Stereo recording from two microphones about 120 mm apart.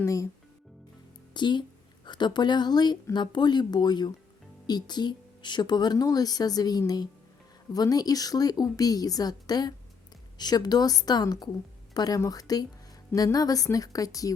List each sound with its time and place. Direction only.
0.0 s a woman's voice: 25° left (ahead or behind)
1.3 s a woman's voice: 40° left (ahead or behind)